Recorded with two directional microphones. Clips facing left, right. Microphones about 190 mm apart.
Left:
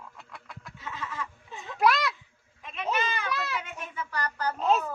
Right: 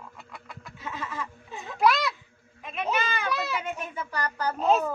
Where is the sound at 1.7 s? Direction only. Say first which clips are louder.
Right 1 dB; centre (ahead or behind).